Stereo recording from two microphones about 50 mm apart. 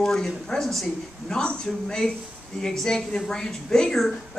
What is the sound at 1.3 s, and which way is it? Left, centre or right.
Speech, centre.